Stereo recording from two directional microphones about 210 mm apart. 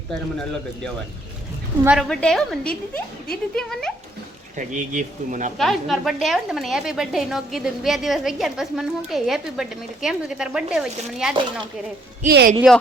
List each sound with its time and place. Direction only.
0.1 s a woman's voice: 5° left (ahead or behind)
1.8 s a woman's voice: 5° right (ahead or behind)
4.5 s speech: 35° right (ahead or behind)
5.5 s a woman's voice: centre (ahead or behind)
12.3 s speech: 50° right (ahead or behind)